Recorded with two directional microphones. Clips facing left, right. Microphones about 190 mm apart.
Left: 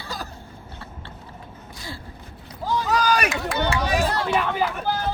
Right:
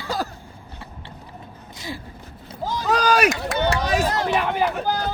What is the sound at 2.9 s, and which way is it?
Speech, 55° right (ahead or behind).